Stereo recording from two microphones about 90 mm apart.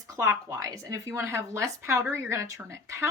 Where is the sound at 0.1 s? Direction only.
40° right (ahead or behind).